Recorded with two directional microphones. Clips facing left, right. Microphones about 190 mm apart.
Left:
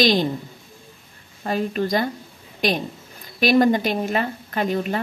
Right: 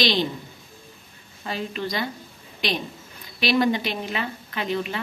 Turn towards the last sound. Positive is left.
turn(degrees=45)  # may be behind; listen again after turning